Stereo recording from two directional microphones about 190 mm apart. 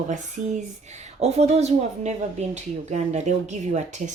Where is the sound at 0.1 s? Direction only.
40° right (ahead or behind).